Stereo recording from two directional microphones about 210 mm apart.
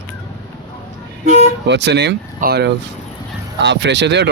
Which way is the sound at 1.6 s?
55° right (ahead or behind).